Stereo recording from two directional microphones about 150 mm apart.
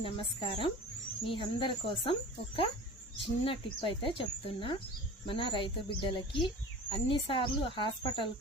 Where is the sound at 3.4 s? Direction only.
35° left (ahead or behind).